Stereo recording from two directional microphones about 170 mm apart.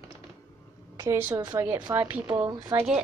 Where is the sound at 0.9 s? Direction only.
15° right (ahead or behind).